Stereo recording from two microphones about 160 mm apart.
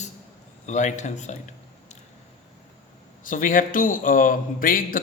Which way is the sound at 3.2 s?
55° left (ahead or behind).